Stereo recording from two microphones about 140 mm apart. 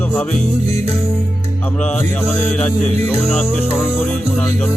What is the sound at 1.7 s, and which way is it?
Music, 10° left (ahead or behind).